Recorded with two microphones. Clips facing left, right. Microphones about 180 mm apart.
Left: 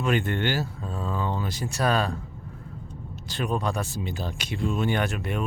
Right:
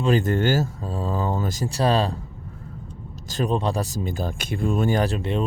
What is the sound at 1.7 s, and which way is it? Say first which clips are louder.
Speech: right 3 dB; 30° right (ahead or behind).